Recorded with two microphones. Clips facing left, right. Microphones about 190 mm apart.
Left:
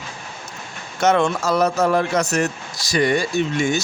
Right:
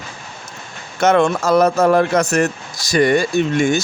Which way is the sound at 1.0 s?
55° right (ahead or behind).